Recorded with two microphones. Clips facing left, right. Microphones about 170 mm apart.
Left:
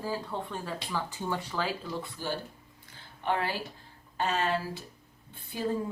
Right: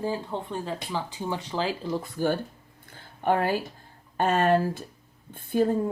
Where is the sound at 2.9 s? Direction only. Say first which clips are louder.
Right 6 dB; 50° right (ahead or behind).